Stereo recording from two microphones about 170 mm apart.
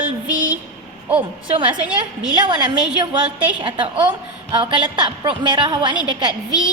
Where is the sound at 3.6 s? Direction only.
30° right (ahead or behind).